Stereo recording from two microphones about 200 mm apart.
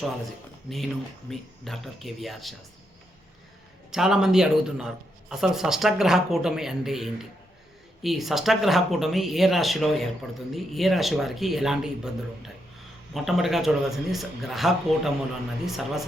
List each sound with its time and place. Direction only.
0.7 s speech: centre (ahead or behind)
3.9 s speech: centre (ahead or behind)
13.1 s speech: centre (ahead or behind)